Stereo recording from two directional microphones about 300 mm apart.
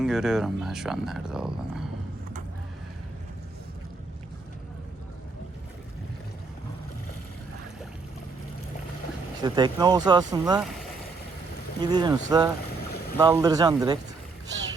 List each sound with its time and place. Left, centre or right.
0.0 s speech: centre
9.4 s speech: centre
11.8 s speech: centre